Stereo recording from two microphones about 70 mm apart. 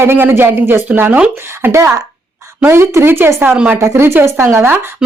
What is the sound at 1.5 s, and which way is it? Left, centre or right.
Speech, right.